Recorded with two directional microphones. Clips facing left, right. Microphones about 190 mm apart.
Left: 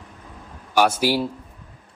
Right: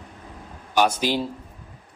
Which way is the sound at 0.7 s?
10° left (ahead or behind).